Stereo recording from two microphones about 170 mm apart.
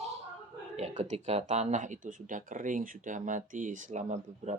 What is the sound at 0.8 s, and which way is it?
Speech, 40° right (ahead or behind).